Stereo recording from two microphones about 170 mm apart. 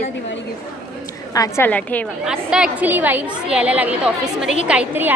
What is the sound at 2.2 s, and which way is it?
A woman's voice, 5° right (ahead or behind).